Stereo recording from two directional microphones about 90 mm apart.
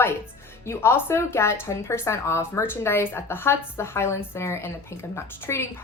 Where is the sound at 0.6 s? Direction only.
30° left (ahead or behind).